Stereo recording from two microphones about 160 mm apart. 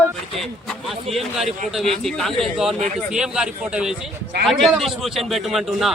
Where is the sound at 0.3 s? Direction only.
Centre (ahead or behind).